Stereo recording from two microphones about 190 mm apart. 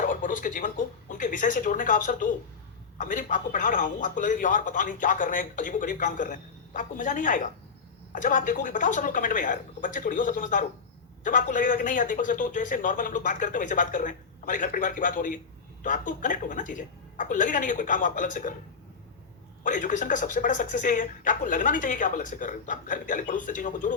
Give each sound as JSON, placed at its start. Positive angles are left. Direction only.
{"t": 0.1, "sound": "a man's voice", "side_deg": 45}
{"t": 19.6, "sound": "a man's voice", "side_deg": 45}